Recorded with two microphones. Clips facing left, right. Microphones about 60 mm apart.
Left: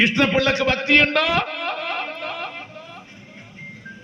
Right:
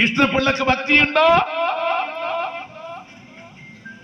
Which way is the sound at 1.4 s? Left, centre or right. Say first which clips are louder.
Right 6 dB; right.